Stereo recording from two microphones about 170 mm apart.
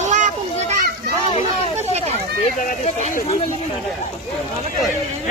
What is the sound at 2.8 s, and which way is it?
Speech, 40° left (ahead or behind).